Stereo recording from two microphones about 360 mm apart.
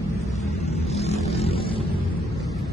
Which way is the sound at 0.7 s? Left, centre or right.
Centre.